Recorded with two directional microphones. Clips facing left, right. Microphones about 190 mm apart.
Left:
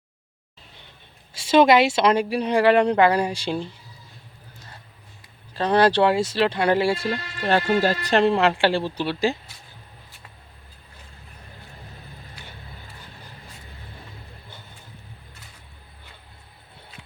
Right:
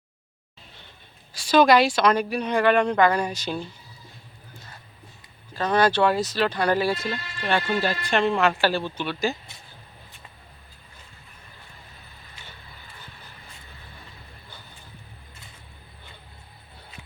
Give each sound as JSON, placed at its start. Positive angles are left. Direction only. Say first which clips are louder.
{"t": 1.3, "sound": "speech", "louder": "left 2 dB", "side_deg": 25}
{"t": 5.5, "sound": "speech", "louder": "left 3 dB", "side_deg": 30}